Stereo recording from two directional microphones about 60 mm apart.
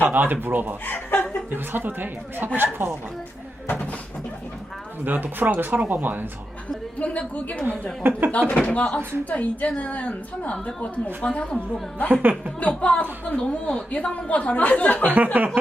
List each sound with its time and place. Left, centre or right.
0.0 s speech: right
0.9 s speech: left
1.5 s speech: right
5.0 s speech: right
7.0 s a woman's voice: left
8.0 s speech: right
8.4 s a woman's voice: left
12.0 s speech: right
12.5 s a woman's voice: left
15.0 s speech: right